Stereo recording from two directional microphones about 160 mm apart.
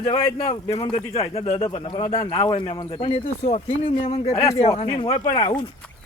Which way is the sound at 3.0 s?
40° left (ahead or behind).